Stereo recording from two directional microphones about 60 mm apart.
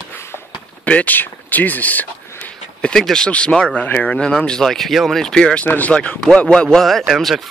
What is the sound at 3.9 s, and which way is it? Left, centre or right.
Speech, left.